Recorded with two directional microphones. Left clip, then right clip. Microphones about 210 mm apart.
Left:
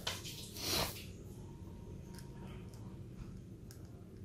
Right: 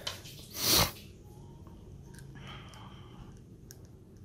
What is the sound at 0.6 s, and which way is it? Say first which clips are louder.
Sneeze: right 10 dB; 55° right (ahead or behind).